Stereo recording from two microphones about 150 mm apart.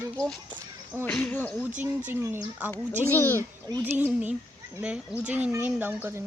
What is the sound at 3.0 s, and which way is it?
Speech, 15° left (ahead or behind).